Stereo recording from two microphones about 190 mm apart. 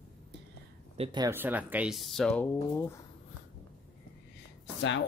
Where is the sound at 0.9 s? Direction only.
25° right (ahead or behind).